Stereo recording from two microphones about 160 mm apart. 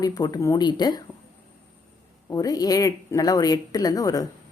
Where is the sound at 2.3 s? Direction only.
25° left (ahead or behind).